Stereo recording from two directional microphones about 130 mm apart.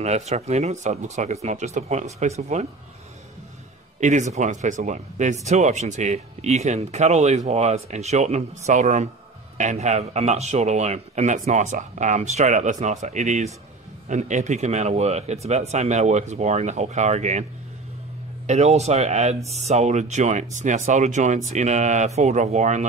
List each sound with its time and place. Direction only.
0.0 s speech: 60° right (ahead or behind)
4.0 s speech: 70° right (ahead or behind)
18.5 s speech: 55° right (ahead or behind)